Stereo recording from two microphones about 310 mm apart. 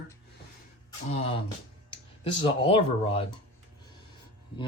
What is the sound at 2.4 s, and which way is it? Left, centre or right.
Speech, centre.